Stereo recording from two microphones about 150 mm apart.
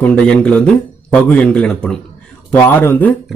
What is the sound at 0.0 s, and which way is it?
A man's voice, 5° left (ahead or behind).